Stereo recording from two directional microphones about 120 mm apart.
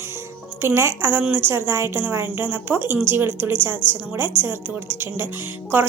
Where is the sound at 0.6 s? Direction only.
20° right (ahead or behind).